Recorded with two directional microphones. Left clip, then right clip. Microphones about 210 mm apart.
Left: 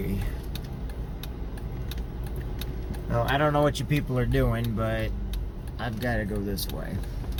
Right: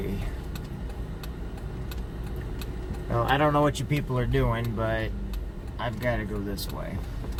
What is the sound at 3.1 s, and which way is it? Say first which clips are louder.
Speech: right 1 dB; 15° left (ahead or behind).